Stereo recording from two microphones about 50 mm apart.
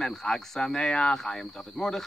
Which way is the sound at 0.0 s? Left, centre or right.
Centre.